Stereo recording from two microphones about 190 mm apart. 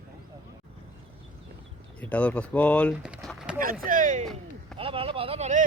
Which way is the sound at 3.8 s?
45° right (ahead or behind).